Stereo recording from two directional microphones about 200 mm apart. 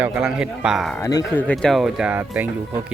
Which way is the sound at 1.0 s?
10° left (ahead or behind).